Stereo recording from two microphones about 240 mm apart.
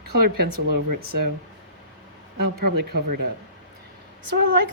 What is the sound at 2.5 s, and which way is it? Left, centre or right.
Speech, right.